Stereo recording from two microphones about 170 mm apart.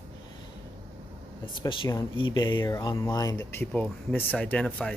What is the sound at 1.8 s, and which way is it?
Speech, 25° left (ahead or behind).